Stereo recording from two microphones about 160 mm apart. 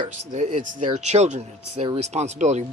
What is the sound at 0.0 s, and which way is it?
Speech, 50° right (ahead or behind).